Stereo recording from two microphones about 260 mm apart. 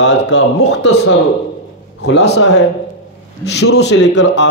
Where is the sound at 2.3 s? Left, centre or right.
Left.